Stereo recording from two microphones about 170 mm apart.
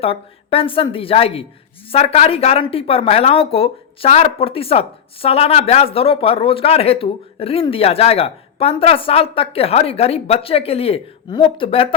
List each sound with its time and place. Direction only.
0.0 s speech: 35° left (ahead or behind)